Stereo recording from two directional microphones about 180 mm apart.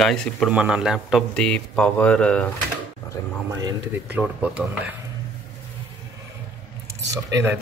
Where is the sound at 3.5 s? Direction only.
20° right (ahead or behind).